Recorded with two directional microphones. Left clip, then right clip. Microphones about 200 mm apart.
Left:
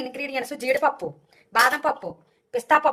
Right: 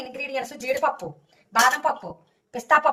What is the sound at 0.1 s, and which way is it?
Speech, 50° left (ahead or behind).